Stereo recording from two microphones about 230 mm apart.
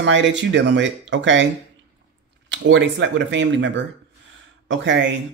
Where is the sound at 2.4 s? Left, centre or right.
Right.